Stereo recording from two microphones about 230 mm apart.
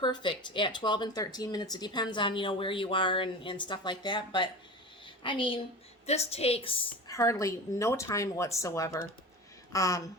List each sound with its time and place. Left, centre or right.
0.0 s speech: left
5.0 s a sound: left
6.1 s a woman's voice: left